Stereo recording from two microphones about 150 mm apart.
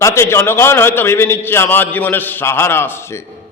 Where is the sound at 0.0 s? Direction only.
15° left (ahead or behind).